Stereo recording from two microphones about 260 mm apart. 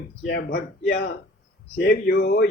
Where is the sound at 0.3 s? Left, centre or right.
Left.